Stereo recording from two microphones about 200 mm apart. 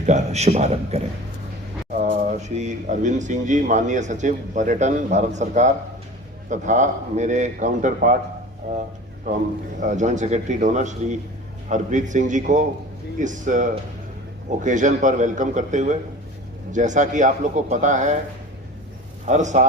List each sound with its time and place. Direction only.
0.0 s speech: 35° right (ahead or behind)
2.1 s speech: 35° right (ahead or behind)
9.8 s speech: 35° right (ahead or behind)
19.3 s speech: 35° right (ahead or behind)